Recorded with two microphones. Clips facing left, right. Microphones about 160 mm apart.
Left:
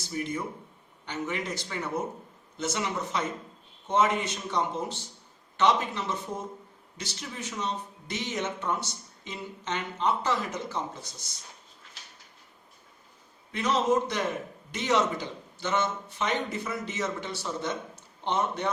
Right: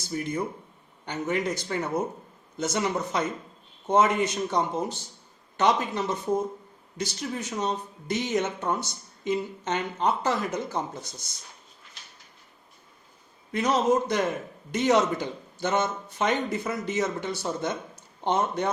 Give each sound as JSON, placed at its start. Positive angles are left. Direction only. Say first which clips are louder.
{"t": 0.1, "sound": "speech", "louder": "right 3 dB", "side_deg": -45}
{"t": 13.5, "sound": "speech", "louder": "right 2 dB", "side_deg": -40}